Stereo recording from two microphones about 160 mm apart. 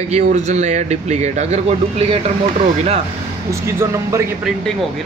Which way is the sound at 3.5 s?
15° right (ahead or behind).